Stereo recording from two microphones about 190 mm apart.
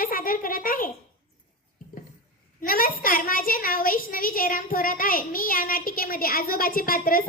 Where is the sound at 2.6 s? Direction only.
50° left (ahead or behind).